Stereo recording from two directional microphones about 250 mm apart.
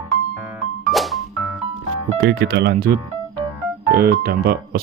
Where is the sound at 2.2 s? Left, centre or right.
Right.